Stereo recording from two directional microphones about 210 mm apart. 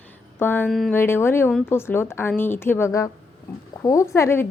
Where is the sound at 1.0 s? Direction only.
10° left (ahead or behind).